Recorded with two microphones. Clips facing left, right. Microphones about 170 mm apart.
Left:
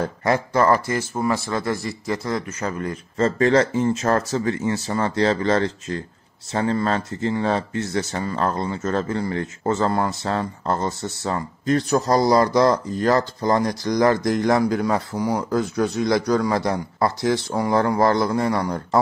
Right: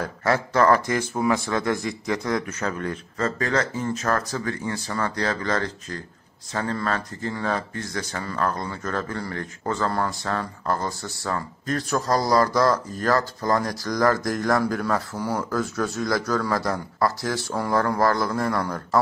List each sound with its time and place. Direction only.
0.0 s speech: 15° left (ahead or behind)
3.2 s speech: 30° left (ahead or behind)